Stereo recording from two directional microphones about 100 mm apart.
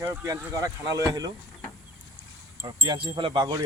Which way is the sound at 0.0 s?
20° right (ahead or behind).